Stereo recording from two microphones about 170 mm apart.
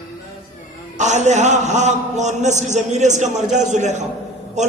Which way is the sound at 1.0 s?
45° right (ahead or behind).